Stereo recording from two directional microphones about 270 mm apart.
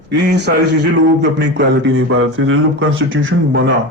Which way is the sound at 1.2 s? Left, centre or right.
Right.